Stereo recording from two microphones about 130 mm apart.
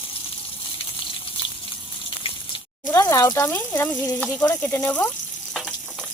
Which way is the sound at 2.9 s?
25° left (ahead or behind).